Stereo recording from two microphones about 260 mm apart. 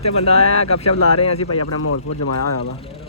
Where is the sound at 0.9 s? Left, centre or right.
Left.